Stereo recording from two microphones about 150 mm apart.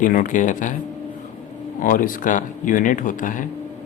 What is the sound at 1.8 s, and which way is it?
Speech, 65° left (ahead or behind).